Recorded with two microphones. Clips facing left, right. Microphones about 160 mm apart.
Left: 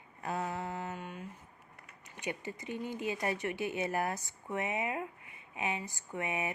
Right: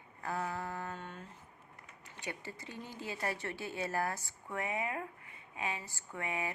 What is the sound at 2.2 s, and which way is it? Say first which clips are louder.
A woman's voice: left 5 dB; 20° left (ahead or behind).